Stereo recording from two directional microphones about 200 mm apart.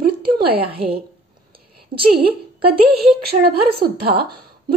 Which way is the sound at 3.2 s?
50° right (ahead or behind).